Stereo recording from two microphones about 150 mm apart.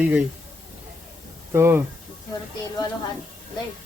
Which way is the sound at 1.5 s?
15° right (ahead or behind).